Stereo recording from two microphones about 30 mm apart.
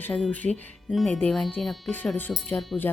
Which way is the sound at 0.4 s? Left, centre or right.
Left.